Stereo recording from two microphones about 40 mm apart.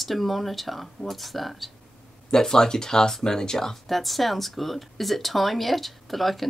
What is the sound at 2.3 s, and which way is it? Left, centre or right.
Speech, centre.